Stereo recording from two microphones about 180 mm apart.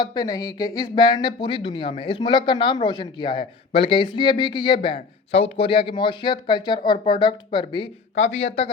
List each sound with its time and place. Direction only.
0.0 s speech: 25° left (ahead or behind)
8.2 s a man's voice: 35° left (ahead or behind)